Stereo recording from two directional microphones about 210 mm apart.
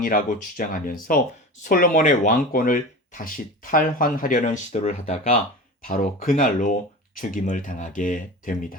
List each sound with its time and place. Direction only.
0.0 s speech: 40° left (ahead or behind)
5.8 s speech: 40° left (ahead or behind)